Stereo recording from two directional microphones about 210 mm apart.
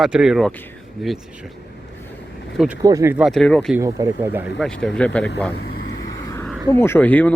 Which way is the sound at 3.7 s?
10° right (ahead or behind).